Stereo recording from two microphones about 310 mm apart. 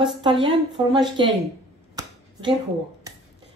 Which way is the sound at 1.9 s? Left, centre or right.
Centre.